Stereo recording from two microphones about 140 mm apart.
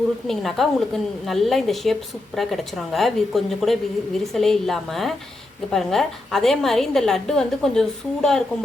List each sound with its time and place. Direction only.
0.3 s a woman's voice: centre (ahead or behind)